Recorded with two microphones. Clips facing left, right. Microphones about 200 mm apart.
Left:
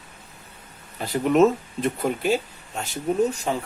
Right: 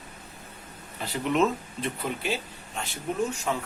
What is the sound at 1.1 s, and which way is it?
Speech, 45° left (ahead or behind).